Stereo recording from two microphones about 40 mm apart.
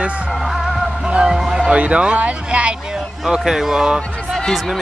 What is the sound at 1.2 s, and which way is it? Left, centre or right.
Speech, centre.